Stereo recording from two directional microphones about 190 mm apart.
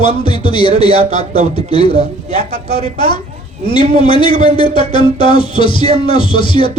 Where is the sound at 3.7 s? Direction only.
25° left (ahead or behind).